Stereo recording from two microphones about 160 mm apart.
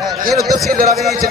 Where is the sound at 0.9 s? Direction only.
Centre (ahead or behind).